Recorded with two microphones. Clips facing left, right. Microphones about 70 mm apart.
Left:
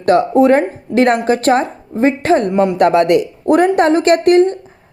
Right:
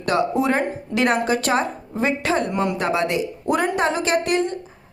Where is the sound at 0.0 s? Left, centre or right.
Left.